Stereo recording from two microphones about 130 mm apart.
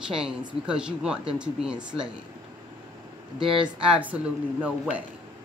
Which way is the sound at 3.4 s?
40° right (ahead or behind).